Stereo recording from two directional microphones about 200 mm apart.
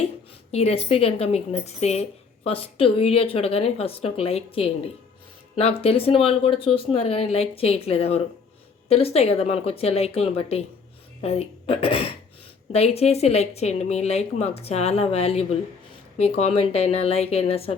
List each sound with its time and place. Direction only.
0.5 s a woman's voice: 30° left (ahead or behind)